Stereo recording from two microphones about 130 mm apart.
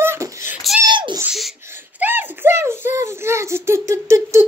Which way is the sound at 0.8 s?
35° right (ahead or behind).